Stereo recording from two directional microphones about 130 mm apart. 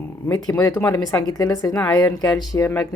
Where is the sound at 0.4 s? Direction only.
30° left (ahead or behind).